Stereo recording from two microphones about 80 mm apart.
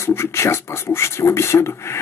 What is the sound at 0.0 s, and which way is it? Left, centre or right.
Speech, left.